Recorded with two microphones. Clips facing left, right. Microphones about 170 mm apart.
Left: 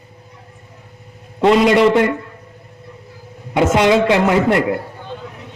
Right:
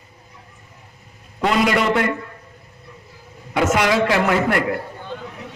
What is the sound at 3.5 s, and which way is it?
A man's voice, 25° left (ahead or behind).